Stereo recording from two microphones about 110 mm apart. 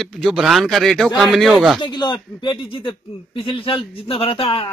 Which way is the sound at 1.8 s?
45° left (ahead or behind).